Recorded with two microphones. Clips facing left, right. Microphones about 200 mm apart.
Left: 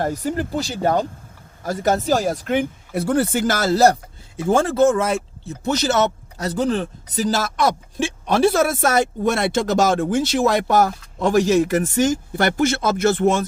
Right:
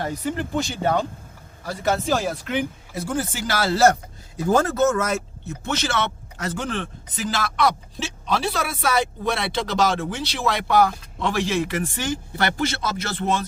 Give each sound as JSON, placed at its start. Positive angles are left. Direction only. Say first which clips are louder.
{"t": 0.0, "sound": "speech", "louder": "left 4 dB", "side_deg": 45}
{"t": 4.4, "sound": "speech", "louder": "left 3 dB", "side_deg": 25}